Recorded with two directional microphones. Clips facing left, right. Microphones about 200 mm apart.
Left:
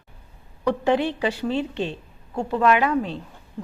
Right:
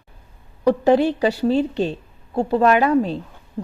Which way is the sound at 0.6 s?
40° right (ahead or behind).